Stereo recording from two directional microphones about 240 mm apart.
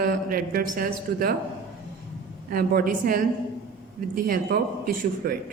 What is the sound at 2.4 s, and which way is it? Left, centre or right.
A woman's voice, right.